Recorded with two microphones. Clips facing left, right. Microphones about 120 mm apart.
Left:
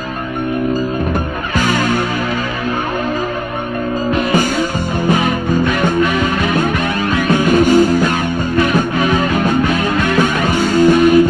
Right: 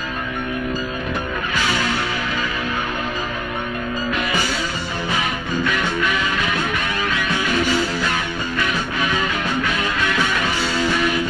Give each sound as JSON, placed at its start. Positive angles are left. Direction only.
{"t": 1.5, "sound": "music", "side_deg": 50}
{"t": 4.3, "sound": "music", "side_deg": 50}
{"t": 7.2, "sound": "music", "side_deg": 50}